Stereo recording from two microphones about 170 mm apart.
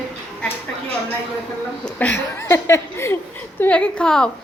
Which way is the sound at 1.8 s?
10° left (ahead or behind).